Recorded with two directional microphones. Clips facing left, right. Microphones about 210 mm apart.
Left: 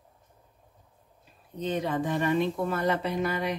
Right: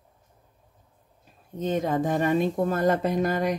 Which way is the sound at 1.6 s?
45° right (ahead or behind).